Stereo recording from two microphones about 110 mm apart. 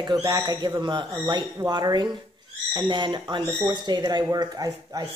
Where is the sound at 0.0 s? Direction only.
40° right (ahead or behind).